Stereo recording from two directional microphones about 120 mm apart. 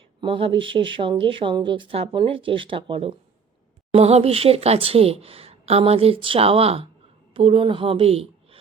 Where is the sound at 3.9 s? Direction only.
60° right (ahead or behind).